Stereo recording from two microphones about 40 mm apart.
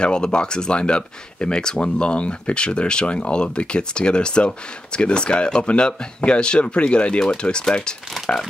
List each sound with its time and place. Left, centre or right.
0.0 s speech: left
8.3 s speech: left